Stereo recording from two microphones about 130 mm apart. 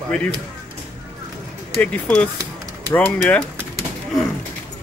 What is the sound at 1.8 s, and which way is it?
Speech, 10° left (ahead or behind).